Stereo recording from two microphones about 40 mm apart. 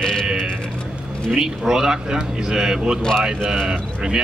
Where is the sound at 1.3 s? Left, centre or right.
Centre.